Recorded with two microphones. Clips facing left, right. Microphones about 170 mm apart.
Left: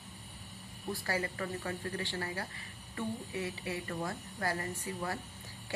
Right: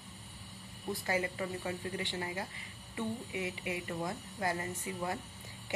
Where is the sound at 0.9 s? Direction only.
20° right (ahead or behind).